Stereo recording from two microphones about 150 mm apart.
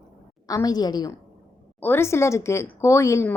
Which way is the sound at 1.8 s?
15° left (ahead or behind).